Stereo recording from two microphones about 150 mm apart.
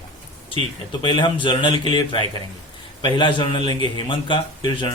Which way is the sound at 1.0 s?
30° left (ahead or behind).